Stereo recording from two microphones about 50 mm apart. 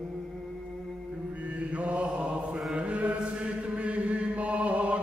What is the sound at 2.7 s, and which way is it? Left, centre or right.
Chant, right.